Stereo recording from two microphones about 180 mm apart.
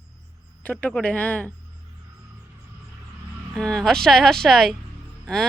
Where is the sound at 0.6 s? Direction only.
10° left (ahead or behind).